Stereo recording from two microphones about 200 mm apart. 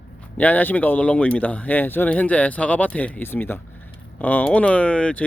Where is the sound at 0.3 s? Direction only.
10° left (ahead or behind).